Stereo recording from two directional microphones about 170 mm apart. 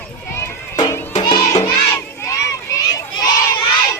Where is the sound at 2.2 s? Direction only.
20° left (ahead or behind).